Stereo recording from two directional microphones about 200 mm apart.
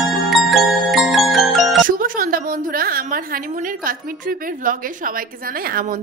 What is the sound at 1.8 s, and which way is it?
A woman's voice, 45° right (ahead or behind).